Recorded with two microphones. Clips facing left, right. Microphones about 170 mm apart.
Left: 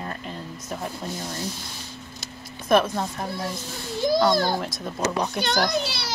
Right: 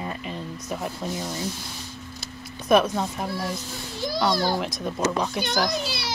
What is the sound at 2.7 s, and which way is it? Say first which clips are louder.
Speech: right 1 dB; centre (ahead or behind).